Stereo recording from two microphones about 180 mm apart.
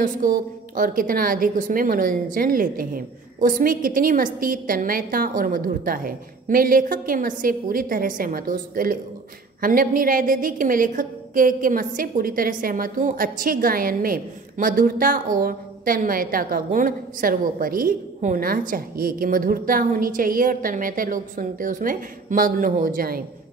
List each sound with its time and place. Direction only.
0.0 s a woman's voice: 50° right (ahead or behind)